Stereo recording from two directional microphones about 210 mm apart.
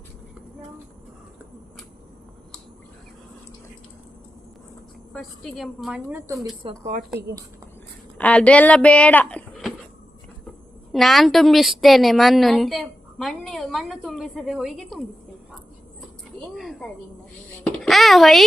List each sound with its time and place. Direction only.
5.1 s a woman's voice: centre (ahead or behind); by 6.5 s 15° right (ahead or behind)
6.6 s speech: 25° right (ahead or behind)
8.2 s a woman's voice: 5° left (ahead or behind)
10.9 s a woman's voice: centre (ahead or behind)
16.6 s a woman's voice: centre (ahead or behind)